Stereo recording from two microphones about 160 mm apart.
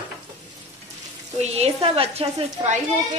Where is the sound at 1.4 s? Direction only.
40° right (ahead or behind).